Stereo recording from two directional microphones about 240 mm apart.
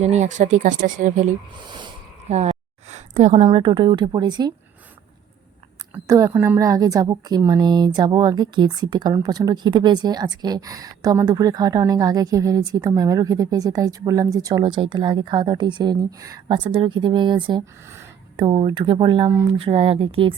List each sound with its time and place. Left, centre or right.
0.0 s speech: right
1.5 s a woman's voice: centre
5.9 s a woman's voice: centre